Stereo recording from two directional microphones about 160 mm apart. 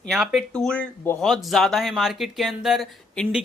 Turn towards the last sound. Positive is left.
turn(degrees=0)  # may be behind; listen again after turning